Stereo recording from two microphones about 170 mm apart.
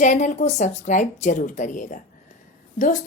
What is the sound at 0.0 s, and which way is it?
A woman's voice, 45° left (ahead or behind).